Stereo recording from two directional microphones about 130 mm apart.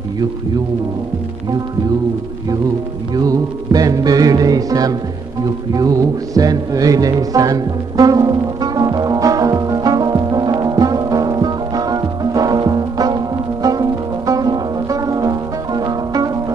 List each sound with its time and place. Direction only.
3.2 s music: 30° right (ahead or behind)